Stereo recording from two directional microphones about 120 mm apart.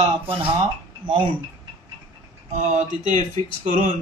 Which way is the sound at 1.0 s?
45° right (ahead or behind).